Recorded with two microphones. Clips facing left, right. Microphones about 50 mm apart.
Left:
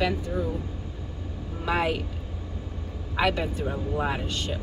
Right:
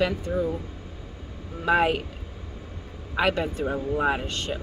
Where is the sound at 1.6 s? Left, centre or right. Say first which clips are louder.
Right 4 dB; centre.